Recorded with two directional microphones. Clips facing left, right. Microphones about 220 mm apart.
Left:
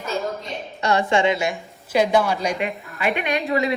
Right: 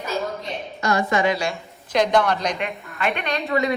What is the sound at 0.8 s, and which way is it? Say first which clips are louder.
Speech: left 2 dB; 30° left (ahead or behind).